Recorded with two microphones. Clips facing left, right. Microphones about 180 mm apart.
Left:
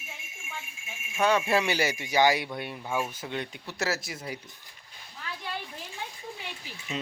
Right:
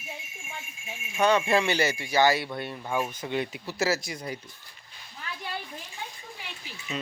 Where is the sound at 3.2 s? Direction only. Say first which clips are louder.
Right 5 dB; centre (ahead or behind).